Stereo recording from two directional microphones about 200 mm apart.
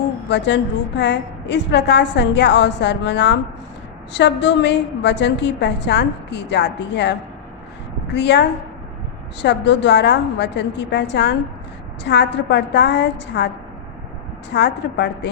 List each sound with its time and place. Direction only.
0.3 s a woman's voice: 60° left (ahead or behind)
14.5 s a woman's voice: 60° left (ahead or behind)